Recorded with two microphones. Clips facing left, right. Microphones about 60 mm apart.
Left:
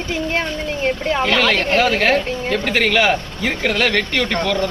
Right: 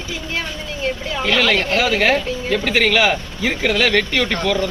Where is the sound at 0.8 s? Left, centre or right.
Left.